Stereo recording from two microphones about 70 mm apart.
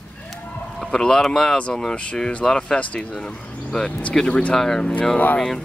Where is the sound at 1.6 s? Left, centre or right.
Centre.